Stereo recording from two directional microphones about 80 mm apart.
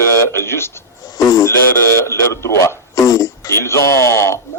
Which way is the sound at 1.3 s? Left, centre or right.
Left.